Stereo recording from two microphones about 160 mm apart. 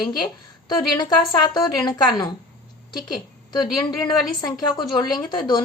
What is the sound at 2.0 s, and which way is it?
Speech, 25° left (ahead or behind).